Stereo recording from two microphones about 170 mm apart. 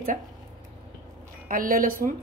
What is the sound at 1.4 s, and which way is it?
Speech, 55° right (ahead or behind).